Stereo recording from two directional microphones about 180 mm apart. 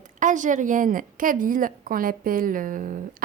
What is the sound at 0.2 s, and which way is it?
A woman's voice, 45° right (ahead or behind).